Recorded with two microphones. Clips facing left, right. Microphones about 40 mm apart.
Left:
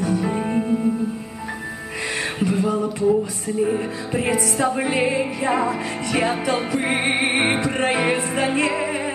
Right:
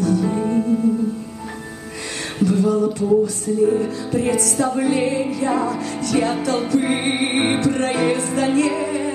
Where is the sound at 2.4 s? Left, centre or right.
Left.